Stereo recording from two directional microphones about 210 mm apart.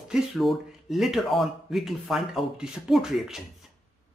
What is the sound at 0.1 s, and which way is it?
Speech, centre (ahead or behind).